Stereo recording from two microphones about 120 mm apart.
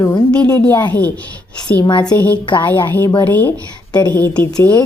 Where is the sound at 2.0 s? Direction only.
15° left (ahead or behind).